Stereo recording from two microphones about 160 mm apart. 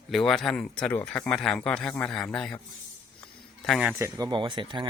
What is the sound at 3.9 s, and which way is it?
Speech, 15° right (ahead or behind).